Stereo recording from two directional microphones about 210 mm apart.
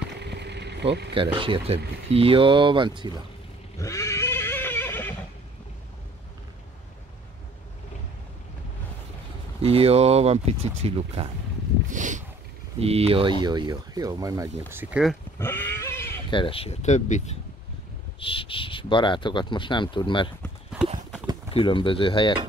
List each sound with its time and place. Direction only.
0.2 s vehicle: 55° right (ahead or behind)
1.1 s speech: 25° right (ahead or behind)
3.8 s neigh: 15° left (ahead or behind)
9.6 s speech: 30° right (ahead or behind)
11.9 s a sound: 35° right (ahead or behind)
12.8 s speech: 30° right (ahead or behind); by 15.1 s 5° right (ahead or behind)
15.3 s goat: 10° left (ahead or behind)
16.3 s speech: 25° left (ahead or behind)
21.5 s speech: 25° left (ahead or behind)